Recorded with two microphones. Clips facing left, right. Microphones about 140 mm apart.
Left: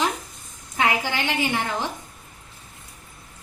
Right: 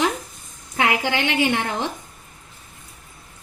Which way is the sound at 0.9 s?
70° right (ahead or behind).